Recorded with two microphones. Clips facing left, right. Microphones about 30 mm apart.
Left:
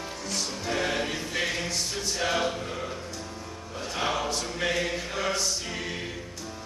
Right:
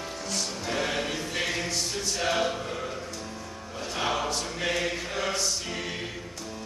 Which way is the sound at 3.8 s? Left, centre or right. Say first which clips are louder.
Even; centre.